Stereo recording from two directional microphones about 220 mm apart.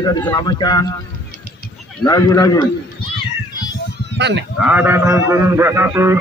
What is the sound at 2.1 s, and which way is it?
A man's voice, 15° left (ahead or behind).